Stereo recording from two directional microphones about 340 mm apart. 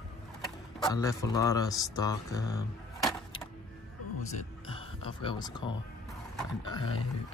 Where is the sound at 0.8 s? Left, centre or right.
Centre.